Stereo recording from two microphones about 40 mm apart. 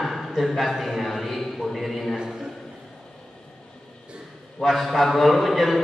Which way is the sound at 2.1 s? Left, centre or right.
Centre.